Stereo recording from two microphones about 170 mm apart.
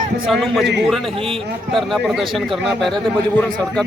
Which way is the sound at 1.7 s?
Centre (ahead or behind).